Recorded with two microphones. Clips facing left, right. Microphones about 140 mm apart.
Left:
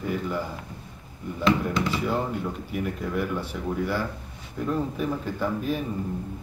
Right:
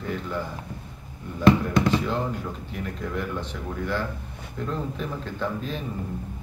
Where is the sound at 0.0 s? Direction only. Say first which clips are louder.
Left 2 dB; 10° left (ahead or behind).